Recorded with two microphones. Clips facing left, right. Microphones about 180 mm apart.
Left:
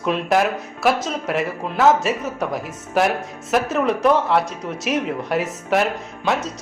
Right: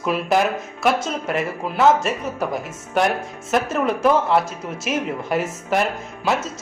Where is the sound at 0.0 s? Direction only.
Centre (ahead or behind).